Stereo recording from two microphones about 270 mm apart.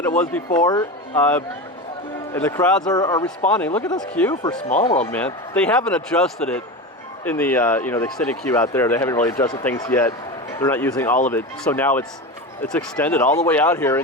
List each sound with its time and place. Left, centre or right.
0.2 s speech: centre
2.9 s speech: centre
3.2 s speech: centre
3.8 s speech: centre
4.8 s speech: centre
5.1 s speech: centre